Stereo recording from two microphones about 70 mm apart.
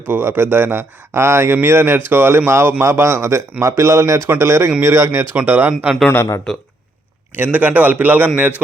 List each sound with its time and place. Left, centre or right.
0.1 s speech: right
5.3 s a man's voice: right
6.5 s speech: centre
7.3 s a man's voice: right